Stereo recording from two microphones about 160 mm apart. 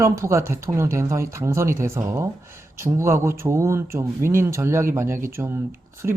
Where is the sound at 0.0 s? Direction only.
15° right (ahead or behind).